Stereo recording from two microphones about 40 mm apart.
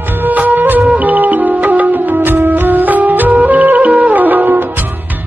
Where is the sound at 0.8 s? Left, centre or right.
Right.